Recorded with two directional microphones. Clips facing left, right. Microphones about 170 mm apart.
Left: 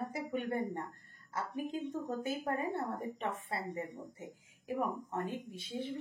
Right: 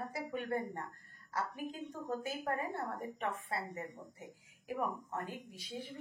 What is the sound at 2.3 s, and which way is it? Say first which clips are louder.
Speech: left 5 dB; 25° left (ahead or behind).